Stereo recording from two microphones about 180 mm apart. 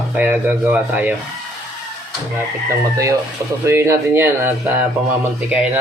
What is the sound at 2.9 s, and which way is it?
Speech, 20° right (ahead or behind).